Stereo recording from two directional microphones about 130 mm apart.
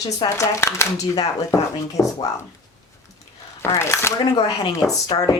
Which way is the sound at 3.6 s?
20° left (ahead or behind).